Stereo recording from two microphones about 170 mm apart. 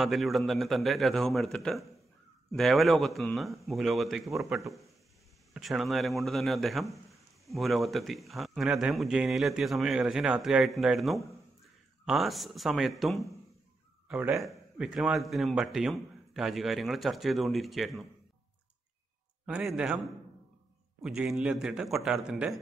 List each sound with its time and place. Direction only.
0.0 s a man's voice: centre (ahead or behind)
19.4 s a man's voice: 5° right (ahead or behind)